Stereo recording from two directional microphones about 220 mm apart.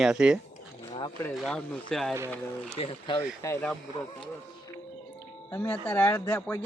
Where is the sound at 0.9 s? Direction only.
20° left (ahead or behind).